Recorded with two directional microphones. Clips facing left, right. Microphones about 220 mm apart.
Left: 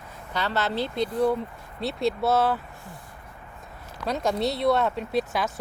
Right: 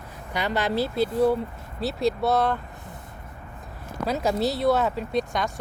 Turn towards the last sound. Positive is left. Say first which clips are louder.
# even
turn(degrees=5)  # may be behind; listen again after turning